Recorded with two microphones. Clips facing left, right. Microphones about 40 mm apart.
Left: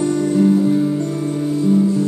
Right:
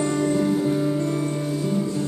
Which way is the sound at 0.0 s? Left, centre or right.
Right.